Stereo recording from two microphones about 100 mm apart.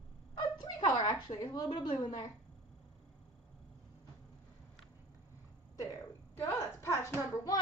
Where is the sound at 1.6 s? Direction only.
45° left (ahead or behind).